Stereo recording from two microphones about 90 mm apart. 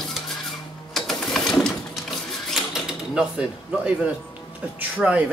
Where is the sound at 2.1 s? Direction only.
5° right (ahead or behind).